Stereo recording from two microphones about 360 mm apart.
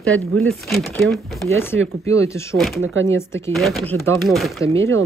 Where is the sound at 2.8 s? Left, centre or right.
Right.